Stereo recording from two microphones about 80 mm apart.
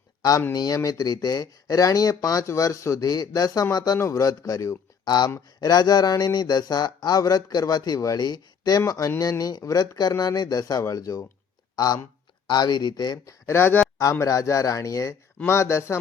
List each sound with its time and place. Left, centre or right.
0.2 s speech: left
3.9 s speech: left
5.0 s speech: left
8.9 s speech: left
12.5 s speech: left
13.4 s speech: left
14.0 s speech: left